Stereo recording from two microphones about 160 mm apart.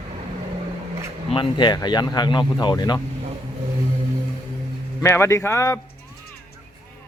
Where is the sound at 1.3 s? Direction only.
30° left (ahead or behind).